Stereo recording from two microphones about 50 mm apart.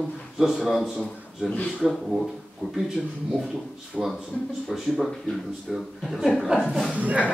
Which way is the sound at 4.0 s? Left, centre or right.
Centre.